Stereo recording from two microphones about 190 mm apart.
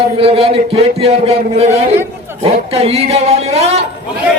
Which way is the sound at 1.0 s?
30° right (ahead or behind).